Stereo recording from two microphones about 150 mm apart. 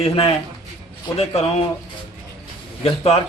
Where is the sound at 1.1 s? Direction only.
40° left (ahead or behind).